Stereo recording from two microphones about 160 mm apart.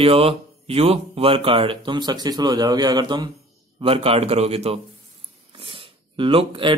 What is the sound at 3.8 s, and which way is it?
Speech, 35° right (ahead or behind).